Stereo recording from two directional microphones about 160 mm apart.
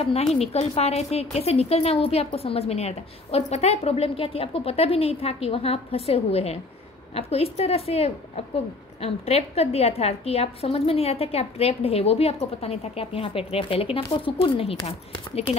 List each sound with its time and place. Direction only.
0.0 s a woman's voice: 40° left (ahead or behind)